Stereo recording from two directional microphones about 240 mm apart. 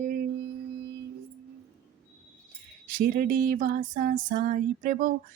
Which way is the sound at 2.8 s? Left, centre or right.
Right.